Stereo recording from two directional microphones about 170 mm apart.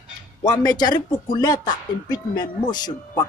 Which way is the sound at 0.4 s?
25° left (ahead or behind).